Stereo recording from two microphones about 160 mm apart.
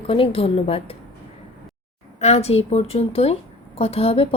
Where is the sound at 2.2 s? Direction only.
40° left (ahead or behind).